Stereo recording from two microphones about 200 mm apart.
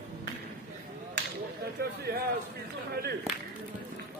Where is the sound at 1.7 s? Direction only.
50° right (ahead or behind).